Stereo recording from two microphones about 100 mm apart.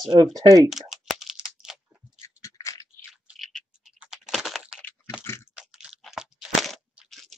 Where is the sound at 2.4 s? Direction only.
30° left (ahead or behind).